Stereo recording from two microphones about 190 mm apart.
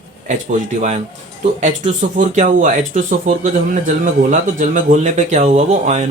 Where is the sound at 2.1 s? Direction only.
40° right (ahead or behind).